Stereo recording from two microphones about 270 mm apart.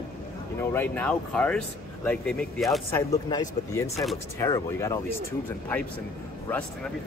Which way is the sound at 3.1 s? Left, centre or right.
Centre.